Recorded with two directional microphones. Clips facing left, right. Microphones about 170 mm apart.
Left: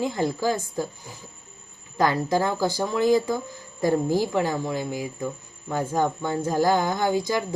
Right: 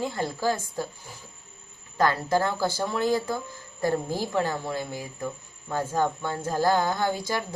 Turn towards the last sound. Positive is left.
turn(degrees=15)  # may be behind; listen again after turning